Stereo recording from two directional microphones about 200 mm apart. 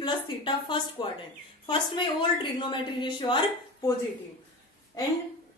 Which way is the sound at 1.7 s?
25° left (ahead or behind).